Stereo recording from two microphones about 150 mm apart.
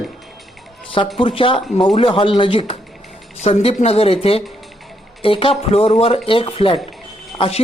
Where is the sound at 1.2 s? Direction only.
35° left (ahead or behind).